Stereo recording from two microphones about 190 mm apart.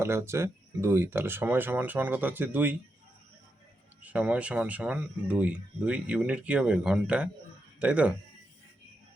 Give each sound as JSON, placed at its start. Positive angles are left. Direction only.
{"t": 0.0, "sound": "speech", "side_deg": -15}
{"t": 4.0, "sound": "speech", "side_deg": -5}